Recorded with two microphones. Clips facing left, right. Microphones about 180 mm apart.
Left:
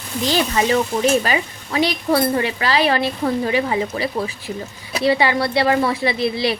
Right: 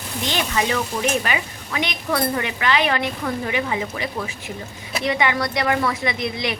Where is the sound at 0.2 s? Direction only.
35° left (ahead or behind).